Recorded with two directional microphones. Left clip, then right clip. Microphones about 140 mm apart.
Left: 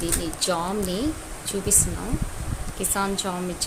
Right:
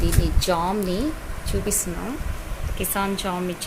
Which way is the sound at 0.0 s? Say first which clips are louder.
Right 1 dB; 20° right (ahead or behind).